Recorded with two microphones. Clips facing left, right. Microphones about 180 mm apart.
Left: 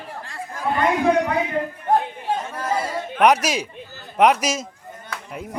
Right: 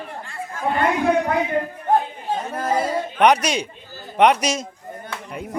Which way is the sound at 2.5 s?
30° right (ahead or behind).